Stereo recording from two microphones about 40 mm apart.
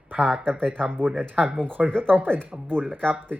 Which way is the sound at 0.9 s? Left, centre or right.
Right.